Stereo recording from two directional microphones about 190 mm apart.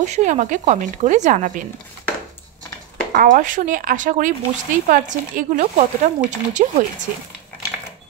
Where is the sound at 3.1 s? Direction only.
45° right (ahead or behind).